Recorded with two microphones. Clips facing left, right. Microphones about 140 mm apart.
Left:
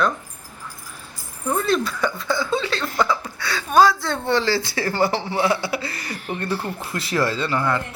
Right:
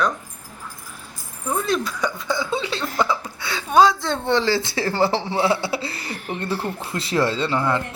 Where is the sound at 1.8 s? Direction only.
15° right (ahead or behind).